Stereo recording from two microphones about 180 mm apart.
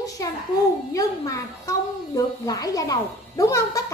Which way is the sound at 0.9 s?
20° left (ahead or behind).